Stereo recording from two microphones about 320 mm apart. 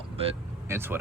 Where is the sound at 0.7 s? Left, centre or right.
Centre.